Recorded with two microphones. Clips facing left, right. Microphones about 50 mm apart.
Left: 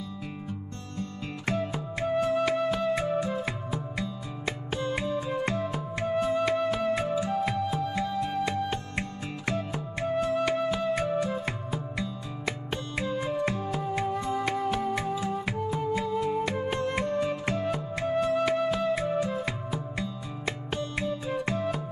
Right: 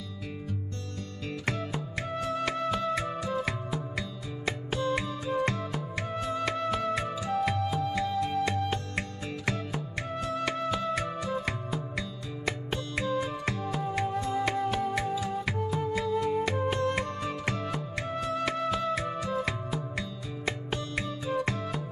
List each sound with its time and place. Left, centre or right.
0.5 s music: centre
12.4 s music: centre
15.1 s music: centre